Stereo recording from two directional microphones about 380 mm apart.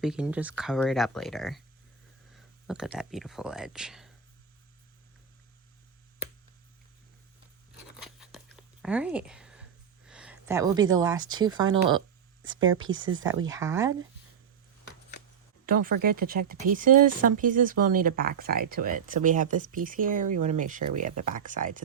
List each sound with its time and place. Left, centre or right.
0.0 s speech: centre
7.9 s a sound: centre
10.1 s speech: centre
12.4 s a sound: centre
12.9 s speech: right
13.5 s speech: centre
15.6 s speech: right